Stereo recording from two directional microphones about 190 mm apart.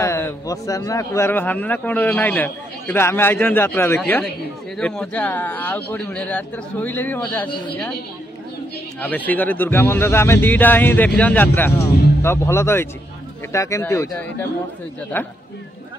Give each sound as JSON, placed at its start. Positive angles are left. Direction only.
{"t": 0.0, "sound": "speech", "side_deg": 15}
{"t": 9.0, "sound": "speech", "side_deg": 10}
{"t": 15.1, "sound": "speech", "side_deg": 10}